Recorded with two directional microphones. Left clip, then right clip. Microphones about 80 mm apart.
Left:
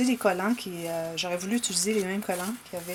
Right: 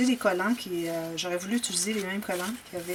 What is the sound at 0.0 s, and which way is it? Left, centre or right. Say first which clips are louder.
Speech: even; left.